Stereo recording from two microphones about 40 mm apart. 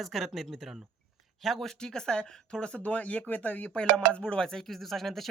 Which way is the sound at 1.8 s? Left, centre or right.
Centre.